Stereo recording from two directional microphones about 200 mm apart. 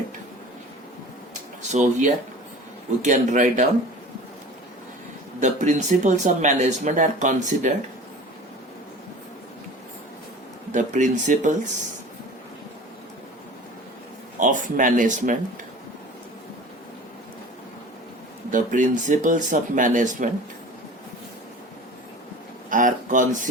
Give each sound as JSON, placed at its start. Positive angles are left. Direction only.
{"t": 1.7, "sound": "speech", "side_deg": -35}
{"t": 5.4, "sound": "speech", "side_deg": -40}
{"t": 10.7, "sound": "speech", "side_deg": -40}
{"t": 14.3, "sound": "speech", "side_deg": -40}
{"t": 18.5, "sound": "speech", "side_deg": -40}
{"t": 22.7, "sound": "a sound", "side_deg": -40}